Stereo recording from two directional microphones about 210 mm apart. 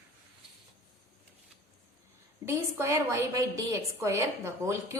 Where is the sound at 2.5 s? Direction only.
10° right (ahead or behind).